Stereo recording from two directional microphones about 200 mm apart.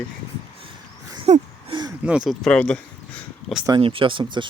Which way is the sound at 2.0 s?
5° right (ahead or behind).